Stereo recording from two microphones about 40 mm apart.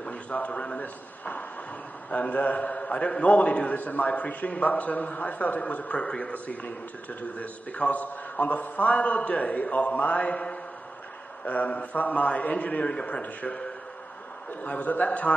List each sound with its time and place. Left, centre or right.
0.0 s a man's voice: left
6.3 s a man's voice: left
14.6 s a man's voice: left